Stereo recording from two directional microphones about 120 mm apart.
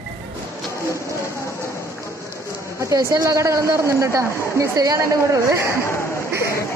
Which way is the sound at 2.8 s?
30° right (ahead or behind).